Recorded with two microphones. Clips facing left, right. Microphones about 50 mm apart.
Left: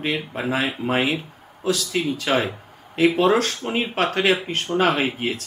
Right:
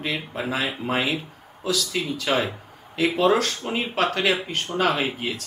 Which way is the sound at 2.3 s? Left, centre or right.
Left.